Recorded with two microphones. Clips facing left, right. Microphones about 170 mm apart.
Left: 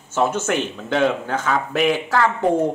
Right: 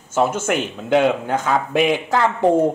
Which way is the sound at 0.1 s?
10° right (ahead or behind).